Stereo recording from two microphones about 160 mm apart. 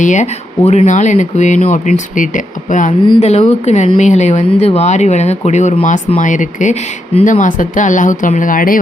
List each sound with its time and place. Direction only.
0.0 s speech: 50° left (ahead or behind)
3.2 s speech: 40° left (ahead or behind); by 8.8 s 60° left (ahead or behind)